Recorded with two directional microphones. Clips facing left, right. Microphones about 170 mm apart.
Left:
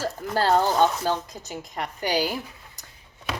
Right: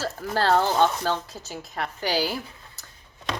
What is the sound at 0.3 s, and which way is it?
A woman's voice, 15° left (ahead or behind).